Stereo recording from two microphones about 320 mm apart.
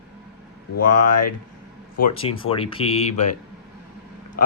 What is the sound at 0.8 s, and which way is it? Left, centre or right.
Speech, left.